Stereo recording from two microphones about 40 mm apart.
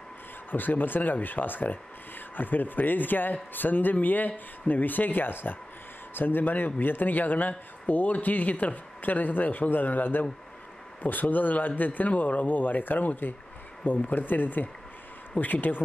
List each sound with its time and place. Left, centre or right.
0.5 s speech: left